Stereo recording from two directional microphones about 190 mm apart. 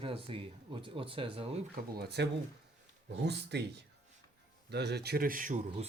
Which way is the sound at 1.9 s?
60° right (ahead or behind).